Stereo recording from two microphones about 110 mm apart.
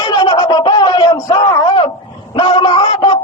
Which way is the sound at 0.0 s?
40° left (ahead or behind).